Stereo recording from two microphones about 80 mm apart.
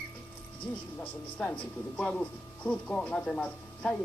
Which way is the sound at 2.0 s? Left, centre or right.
Centre.